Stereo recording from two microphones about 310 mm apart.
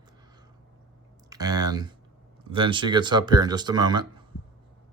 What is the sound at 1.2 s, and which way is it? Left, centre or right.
A man's voice, centre.